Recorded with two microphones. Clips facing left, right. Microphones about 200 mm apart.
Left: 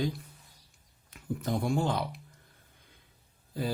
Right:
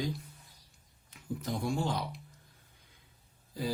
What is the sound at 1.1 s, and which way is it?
Speech, 55° left (ahead or behind).